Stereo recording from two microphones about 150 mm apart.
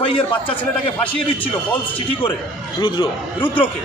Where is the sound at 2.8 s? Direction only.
35° left (ahead or behind).